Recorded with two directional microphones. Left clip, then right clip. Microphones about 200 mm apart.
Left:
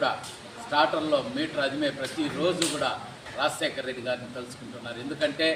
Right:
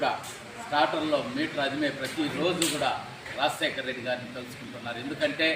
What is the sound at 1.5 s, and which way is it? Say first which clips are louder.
Speech: left 2 dB; 5° left (ahead or behind).